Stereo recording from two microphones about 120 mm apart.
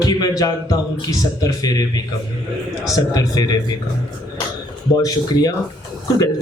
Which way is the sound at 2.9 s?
30° left (ahead or behind).